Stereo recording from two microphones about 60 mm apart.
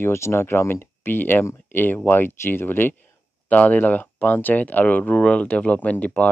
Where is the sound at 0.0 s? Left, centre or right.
Left.